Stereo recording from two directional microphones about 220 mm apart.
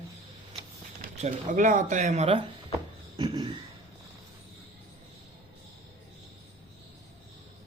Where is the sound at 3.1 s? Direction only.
20° right (ahead or behind).